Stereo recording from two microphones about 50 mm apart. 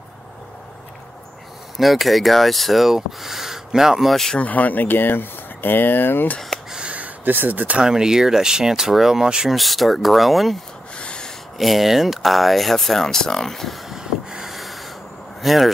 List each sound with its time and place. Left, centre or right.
1.8 s speech: centre
4.4 s speech: left
6.9 s a sound: right
7.8 s speech: centre
9.6 s speech: centre
11.0 s a sound: centre
11.5 s speech: centre
13.8 s snort: centre
15.4 s speech: centre